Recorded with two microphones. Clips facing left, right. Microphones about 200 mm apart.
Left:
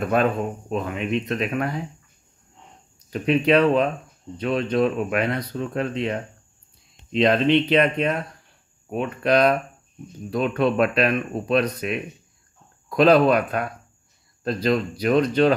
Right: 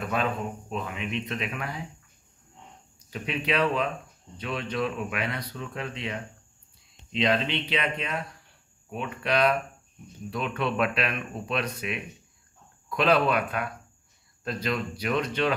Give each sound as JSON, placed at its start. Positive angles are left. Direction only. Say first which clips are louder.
{"t": 0.1, "sound": "speech", "louder": "left 7 dB", "side_deg": 45}
{"t": 3.1, "sound": "speech", "louder": "left 11 dB", "side_deg": 45}